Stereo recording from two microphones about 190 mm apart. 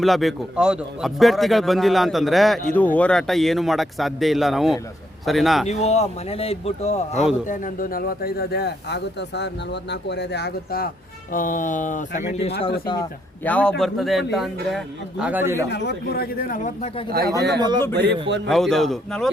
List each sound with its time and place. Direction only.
0.0 s a man's voice: centre (ahead or behind)
5.6 s a man's voice: 35° left (ahead or behind)
12.8 s a man's voice: 25° left (ahead or behind)
13.4 s a man's voice: 5° left (ahead or behind); by 15.6 s 10° right (ahead or behind)
15.7 s speech: 60° left (ahead or behind); by 16.9 s 40° left (ahead or behind)
17.1 s speech: 50° right (ahead or behind)
17.6 s speech: 20° right (ahead or behind)
17.9 s a man's voice: 65° right (ahead or behind)
18.4 s a man's voice: centre (ahead or behind)